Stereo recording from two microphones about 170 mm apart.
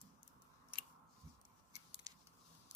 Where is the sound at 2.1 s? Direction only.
25° right (ahead or behind).